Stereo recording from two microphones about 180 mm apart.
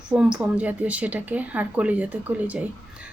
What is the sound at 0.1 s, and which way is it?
A woman's voice, 5° right (ahead or behind).